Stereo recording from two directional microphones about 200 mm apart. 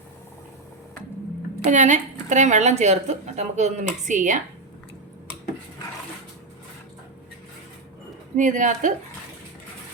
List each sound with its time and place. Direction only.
1.7 s a woman's voice: 40° right (ahead or behind)
8.4 s a woman's voice: 40° right (ahead or behind)